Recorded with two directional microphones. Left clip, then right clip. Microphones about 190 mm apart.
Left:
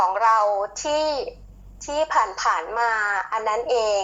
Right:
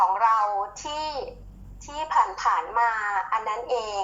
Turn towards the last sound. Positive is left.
turn(degrees=15)  # may be behind; listen again after turning